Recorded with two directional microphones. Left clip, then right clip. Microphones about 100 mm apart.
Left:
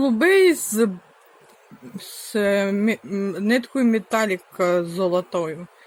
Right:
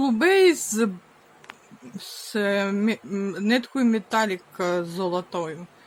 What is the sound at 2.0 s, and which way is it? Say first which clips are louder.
Speech: left 3 dB; 25° left (ahead or behind).